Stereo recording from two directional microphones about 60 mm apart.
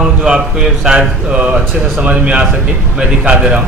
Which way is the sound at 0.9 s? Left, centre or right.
Centre.